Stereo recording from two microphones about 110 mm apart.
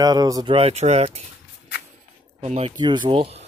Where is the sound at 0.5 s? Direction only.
70° right (ahead or behind).